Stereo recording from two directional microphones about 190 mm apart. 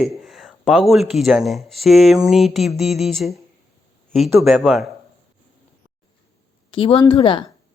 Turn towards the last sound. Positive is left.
turn(degrees=25)  # may be behind; listen again after turning